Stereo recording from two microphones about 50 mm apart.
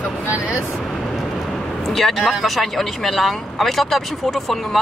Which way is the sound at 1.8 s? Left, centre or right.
Centre.